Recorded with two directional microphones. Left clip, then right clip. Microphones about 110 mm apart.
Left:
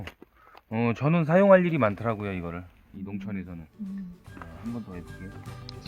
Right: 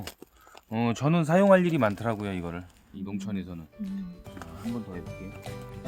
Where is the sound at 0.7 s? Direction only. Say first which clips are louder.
Left 1 dB; 35° left (ahead or behind); by 2.6 s 15° left (ahead or behind).